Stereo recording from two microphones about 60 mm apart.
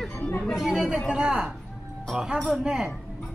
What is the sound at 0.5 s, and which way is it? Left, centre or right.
Chatter, centre.